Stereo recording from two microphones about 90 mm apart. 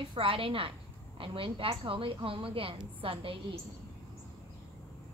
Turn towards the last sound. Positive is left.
turn(degrees=-80)